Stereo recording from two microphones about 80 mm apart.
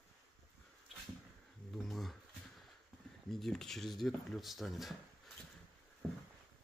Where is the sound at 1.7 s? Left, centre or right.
Centre.